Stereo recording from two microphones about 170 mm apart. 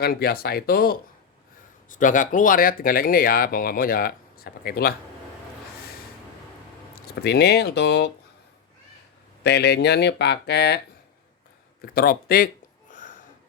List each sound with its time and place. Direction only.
0.0 s speech: 65° left (ahead or behind)
1.9 s speech: 50° left (ahead or behind)
6.9 s speech: 70° left (ahead or behind)
9.4 s speech: 80° left
11.8 s speech: 60° left (ahead or behind)
12.9 s a sound: 50° left (ahead or behind)